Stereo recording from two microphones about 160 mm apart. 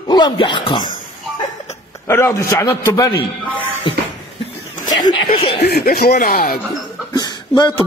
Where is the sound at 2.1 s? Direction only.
15° left (ahead or behind).